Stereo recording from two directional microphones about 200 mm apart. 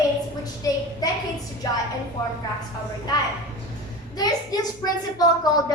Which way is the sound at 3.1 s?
20° left (ahead or behind).